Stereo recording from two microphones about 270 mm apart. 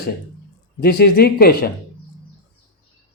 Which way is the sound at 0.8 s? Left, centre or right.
Left.